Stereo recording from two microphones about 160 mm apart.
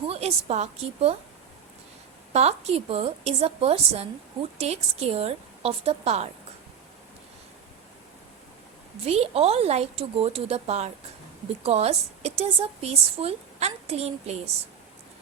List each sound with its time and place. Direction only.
0.1 s a woman's voice: 40° right (ahead or behind)
2.3 s a woman's voice: 40° right (ahead or behind)
9.0 s a woman's voice: 40° right (ahead or behind)